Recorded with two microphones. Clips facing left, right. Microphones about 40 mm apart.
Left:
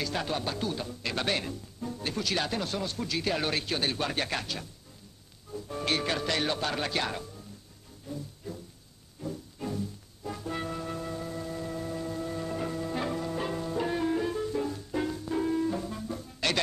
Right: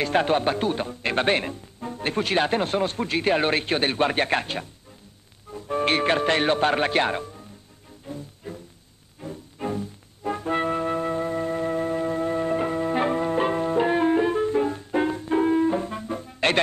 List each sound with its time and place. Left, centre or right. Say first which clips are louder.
0.0 s speech: right 10 dB; right
8.1 s music: right 3 dB; right